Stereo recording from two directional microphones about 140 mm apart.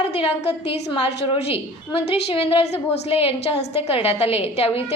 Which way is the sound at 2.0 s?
45° left (ahead or behind).